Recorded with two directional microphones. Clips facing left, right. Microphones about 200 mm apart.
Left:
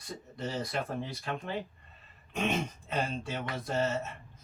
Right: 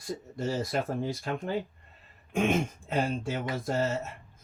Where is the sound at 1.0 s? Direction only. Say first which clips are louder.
Right 5 dB; 45° right (ahead or behind).